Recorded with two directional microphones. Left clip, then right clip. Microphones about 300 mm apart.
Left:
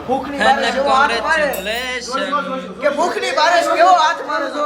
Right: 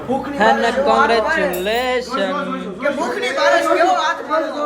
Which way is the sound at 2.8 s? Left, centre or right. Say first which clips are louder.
Left 3 dB; left.